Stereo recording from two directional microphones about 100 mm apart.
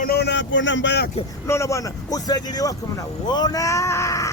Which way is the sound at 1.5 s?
30° left (ahead or behind).